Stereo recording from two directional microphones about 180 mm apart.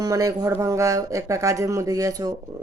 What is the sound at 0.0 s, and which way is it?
Speech, 20° right (ahead or behind).